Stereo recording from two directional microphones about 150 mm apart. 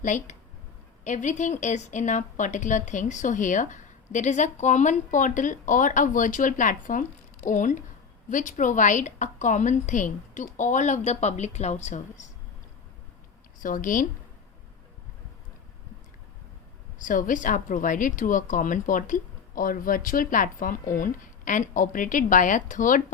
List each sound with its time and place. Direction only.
0.0 s a woman's voice: 55° left (ahead or behind)
13.6 s a woman's voice: 65° left (ahead or behind)
17.0 s a woman's voice: 65° left (ahead or behind)